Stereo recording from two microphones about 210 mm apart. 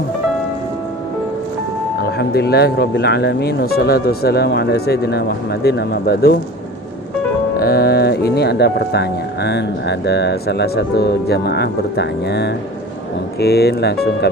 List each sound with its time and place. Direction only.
2.0 s speech: 50° left (ahead or behind)
7.5 s speech: 45° left (ahead or behind)